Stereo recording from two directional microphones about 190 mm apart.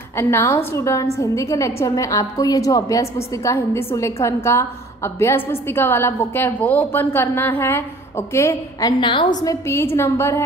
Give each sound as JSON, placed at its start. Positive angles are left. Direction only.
{"t": 0.1, "sound": "a woman's voice", "side_deg": 15}
{"t": 9.0, "sound": "a woman's voice", "side_deg": 25}